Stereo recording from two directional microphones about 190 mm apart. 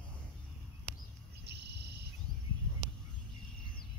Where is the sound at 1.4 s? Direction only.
60° right (ahead or behind).